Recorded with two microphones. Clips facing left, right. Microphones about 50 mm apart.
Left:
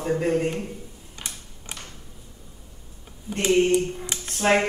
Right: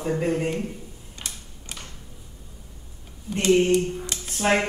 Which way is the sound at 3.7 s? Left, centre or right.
Left.